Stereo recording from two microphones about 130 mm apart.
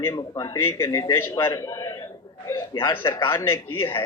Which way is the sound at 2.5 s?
35° left (ahead or behind).